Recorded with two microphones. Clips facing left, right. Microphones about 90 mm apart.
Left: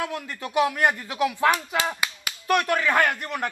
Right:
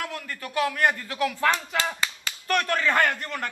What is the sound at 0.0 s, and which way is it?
A woman's voice, 15° left (ahead or behind).